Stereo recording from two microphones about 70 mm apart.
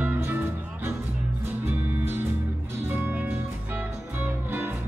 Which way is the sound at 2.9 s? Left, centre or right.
Right.